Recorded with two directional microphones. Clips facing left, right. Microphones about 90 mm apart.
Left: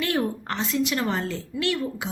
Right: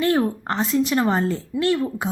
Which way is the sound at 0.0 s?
30° right (ahead or behind).